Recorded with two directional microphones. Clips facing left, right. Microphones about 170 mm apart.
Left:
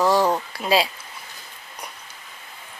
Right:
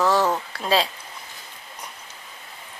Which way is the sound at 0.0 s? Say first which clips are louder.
Left 2 dB; 15° left (ahead or behind).